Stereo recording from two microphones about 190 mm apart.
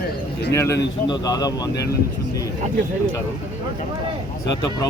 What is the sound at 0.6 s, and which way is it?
Speech, 15° left (ahead or behind).